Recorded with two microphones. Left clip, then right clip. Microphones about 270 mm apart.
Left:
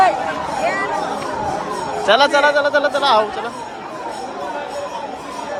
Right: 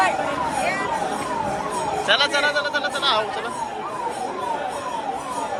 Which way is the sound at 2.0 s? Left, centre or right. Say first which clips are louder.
Left 7 dB; centre.